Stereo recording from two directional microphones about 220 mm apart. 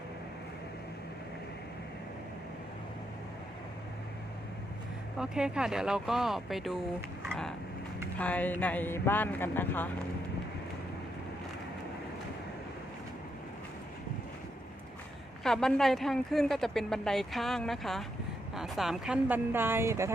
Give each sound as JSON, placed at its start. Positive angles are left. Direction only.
{"t": 5.1, "sound": "speech", "side_deg": -5}
{"t": 8.2, "sound": "speech", "side_deg": 5}
{"t": 15.4, "sound": "speech", "side_deg": 0}